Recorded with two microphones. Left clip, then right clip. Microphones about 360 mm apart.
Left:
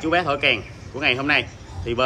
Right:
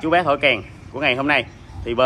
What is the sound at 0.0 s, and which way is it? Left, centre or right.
A man's voice, centre.